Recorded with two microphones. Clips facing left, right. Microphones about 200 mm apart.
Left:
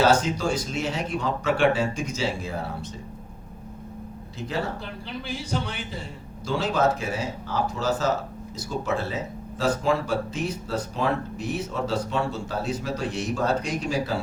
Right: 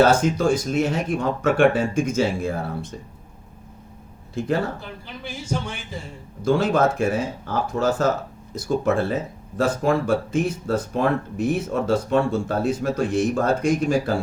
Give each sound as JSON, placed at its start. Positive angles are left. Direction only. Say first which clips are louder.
{"t": 0.0, "sound": "speech", "louder": "right 4 dB", "side_deg": -50}
{"t": 4.4, "sound": "speech", "louder": "right 9 dB", "side_deg": -50}
{"t": 6.4, "sound": "speech", "louder": "right 5 dB", "side_deg": -50}